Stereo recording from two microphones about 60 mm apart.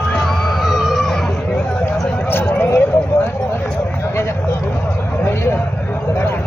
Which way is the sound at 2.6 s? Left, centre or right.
Left.